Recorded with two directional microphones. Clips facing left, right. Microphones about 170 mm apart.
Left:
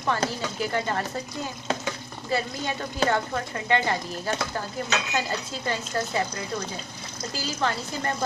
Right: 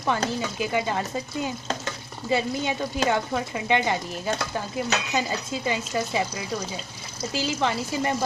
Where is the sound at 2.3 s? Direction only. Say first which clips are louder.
Right 3 dB; 20° right (ahead or behind).